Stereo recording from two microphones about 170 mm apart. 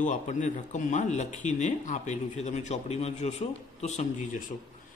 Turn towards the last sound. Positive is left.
turn(degrees=45)  # may be behind; listen again after turning